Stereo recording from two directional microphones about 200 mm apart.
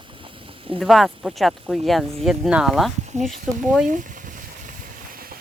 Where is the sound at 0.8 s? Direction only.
Centre (ahead or behind).